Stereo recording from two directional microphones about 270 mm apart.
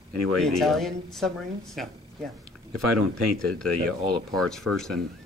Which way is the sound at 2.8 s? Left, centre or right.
Left.